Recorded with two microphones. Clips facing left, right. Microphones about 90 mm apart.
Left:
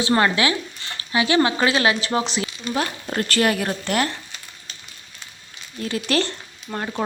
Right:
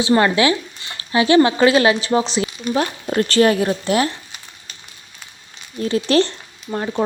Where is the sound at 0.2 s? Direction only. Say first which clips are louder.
Right 4 dB; 25° right (ahead or behind).